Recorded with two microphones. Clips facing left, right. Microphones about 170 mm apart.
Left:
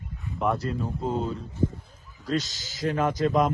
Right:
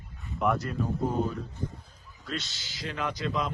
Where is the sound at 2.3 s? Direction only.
40° left (ahead or behind).